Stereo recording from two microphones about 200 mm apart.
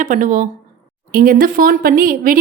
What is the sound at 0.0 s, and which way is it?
A woman's voice, 40° right (ahead or behind).